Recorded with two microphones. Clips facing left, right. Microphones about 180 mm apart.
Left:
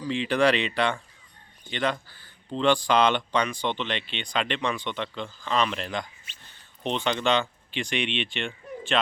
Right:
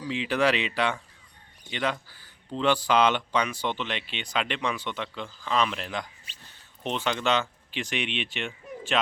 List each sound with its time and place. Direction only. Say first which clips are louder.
0.0 s speech: left 2 dB; 5° right (ahead or behind)
6.3 s a sound: even; 35° right (ahead or behind)
6.8 s speech: left 2 dB; 5° right (ahead or behind)